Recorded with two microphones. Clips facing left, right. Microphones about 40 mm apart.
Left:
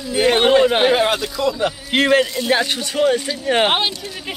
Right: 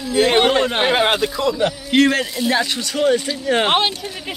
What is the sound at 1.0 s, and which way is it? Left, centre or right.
Speech, right.